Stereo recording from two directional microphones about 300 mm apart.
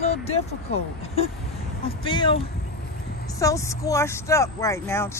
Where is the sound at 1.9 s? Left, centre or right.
Centre.